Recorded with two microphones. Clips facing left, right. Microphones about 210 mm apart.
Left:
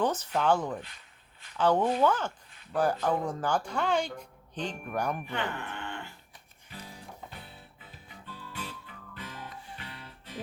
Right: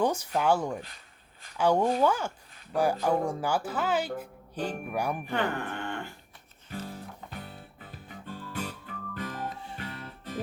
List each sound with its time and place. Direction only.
0.0 s speech: 10° right (ahead or behind)
5.2 s speech: 45° right (ahead or behind)
6.7 s music: 50° right (ahead or behind)